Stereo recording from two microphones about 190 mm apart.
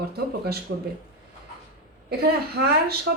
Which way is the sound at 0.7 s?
60° right (ahead or behind).